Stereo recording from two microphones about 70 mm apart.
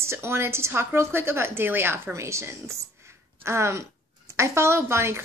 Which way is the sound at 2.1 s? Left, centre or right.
Right.